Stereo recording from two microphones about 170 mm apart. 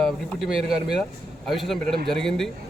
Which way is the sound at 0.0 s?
Centre (ahead or behind).